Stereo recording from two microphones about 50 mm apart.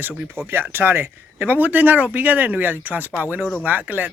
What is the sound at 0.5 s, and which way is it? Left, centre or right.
Speech, right.